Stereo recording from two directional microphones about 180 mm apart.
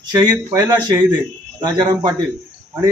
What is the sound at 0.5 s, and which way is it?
Speech, 20° right (ahead or behind).